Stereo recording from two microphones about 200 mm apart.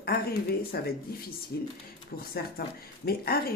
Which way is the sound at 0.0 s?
50° left (ahead or behind).